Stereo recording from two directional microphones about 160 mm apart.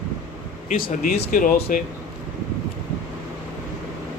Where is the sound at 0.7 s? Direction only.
60° left (ahead or behind).